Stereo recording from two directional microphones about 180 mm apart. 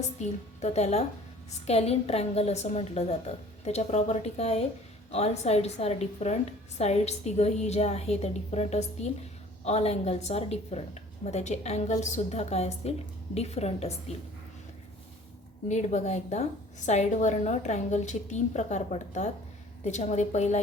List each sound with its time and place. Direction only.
0.2 s a woman's voice: 40° left (ahead or behind)
15.7 s a woman's voice: 40° left (ahead or behind)